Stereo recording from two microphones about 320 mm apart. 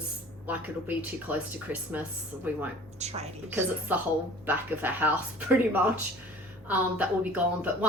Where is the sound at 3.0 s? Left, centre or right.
Centre.